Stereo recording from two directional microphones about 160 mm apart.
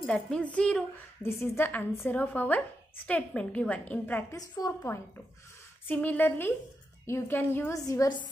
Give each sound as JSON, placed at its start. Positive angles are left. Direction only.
{"t": 0.0, "sound": "a woman's voice", "side_deg": 5}
{"t": 4.4, "sound": "a woman's voice", "side_deg": 25}